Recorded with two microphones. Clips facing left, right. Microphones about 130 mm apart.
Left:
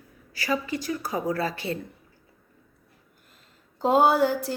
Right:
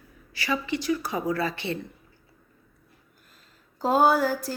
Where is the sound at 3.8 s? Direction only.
25° left (ahead or behind).